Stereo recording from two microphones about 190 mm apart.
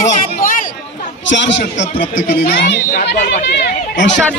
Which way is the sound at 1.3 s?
70° left (ahead or behind).